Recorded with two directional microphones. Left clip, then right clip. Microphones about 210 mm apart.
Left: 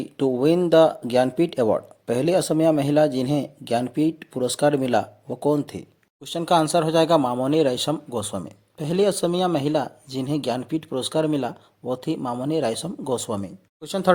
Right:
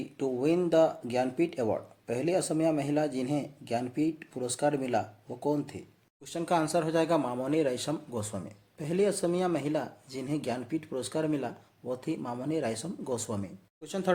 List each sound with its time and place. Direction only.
0.2 s speech: 35° left (ahead or behind)